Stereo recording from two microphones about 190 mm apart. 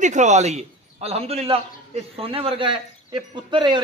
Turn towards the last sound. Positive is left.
turn(degrees=-25)  # may be behind; listen again after turning